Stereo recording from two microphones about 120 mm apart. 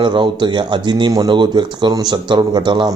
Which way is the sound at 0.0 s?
40° right (ahead or behind).